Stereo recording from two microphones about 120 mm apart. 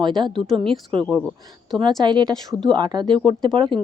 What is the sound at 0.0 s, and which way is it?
Speech, 40° right (ahead or behind).